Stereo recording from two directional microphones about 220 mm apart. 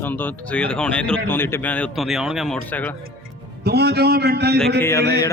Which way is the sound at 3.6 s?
45° right (ahead or behind).